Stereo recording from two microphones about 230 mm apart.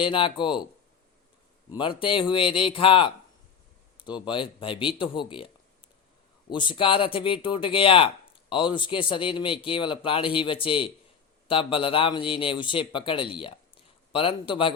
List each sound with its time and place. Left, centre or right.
0.0 s speech: left
1.7 s speech: left
6.5 s speech: left